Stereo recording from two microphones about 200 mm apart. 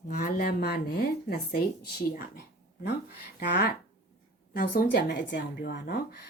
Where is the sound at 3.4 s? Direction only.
50° left (ahead or behind).